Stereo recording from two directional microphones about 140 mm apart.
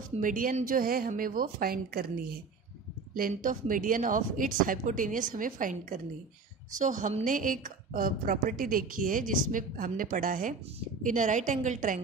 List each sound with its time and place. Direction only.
0.2 s speech: 75° right (ahead or behind)
3.2 s a woman's voice: 80° right
11.1 s a woman's voice: 60° right (ahead or behind)